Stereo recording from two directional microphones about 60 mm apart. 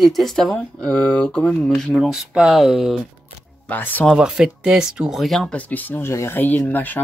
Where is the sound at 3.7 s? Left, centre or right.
Left.